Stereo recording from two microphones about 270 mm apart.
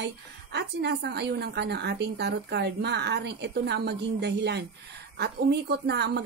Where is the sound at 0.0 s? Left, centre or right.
Right.